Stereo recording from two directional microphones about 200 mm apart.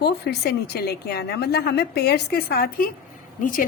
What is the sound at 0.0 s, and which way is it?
A woman's voice, 55° left (ahead or behind).